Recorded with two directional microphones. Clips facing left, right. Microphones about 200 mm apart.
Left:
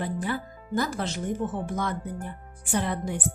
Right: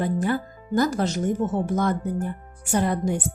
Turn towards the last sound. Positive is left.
turn(degrees=-45)  # may be behind; listen again after turning